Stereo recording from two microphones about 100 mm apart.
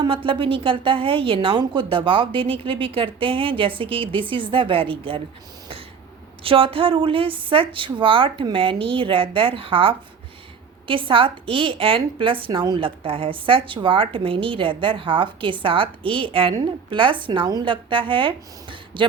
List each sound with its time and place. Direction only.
0.0 s a woman's voice: 60° right (ahead or behind)
6.4 s a woman's voice: 65° right (ahead or behind)